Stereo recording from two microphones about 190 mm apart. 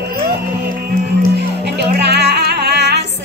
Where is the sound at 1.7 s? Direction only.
60° right (ahead or behind).